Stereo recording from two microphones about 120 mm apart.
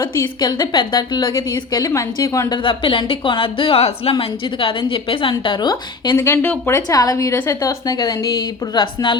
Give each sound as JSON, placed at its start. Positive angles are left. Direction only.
{"t": 0.0, "sound": "a woman's voice", "side_deg": 35}
{"t": 2.6, "sound": "a woman's voice", "side_deg": 45}
{"t": 4.1, "sound": "a woman's voice", "side_deg": 45}
{"t": 6.1, "sound": "a woman's voice", "side_deg": 20}
{"t": 6.7, "sound": "a woman's voice", "side_deg": 30}